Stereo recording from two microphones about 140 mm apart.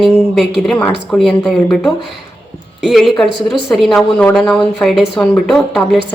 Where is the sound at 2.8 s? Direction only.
Centre (ahead or behind).